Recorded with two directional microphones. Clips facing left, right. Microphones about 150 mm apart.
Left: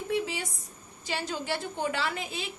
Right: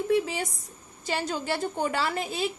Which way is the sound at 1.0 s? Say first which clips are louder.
Right 3 dB; 45° right (ahead or behind).